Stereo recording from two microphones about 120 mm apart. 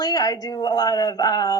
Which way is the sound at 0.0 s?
30° left (ahead or behind).